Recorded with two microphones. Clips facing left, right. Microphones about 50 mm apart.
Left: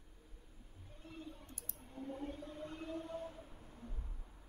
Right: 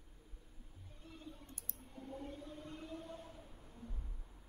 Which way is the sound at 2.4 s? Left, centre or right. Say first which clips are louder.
Left 3 dB; left.